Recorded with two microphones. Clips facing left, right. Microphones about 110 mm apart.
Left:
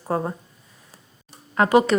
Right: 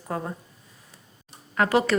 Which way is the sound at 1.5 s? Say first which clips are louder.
Left 4 dB; 20° left (ahead or behind).